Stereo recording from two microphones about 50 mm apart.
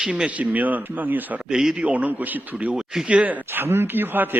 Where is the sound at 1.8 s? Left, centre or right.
Right.